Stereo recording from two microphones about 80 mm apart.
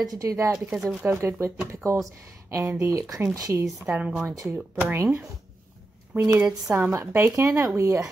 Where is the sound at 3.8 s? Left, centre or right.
Centre.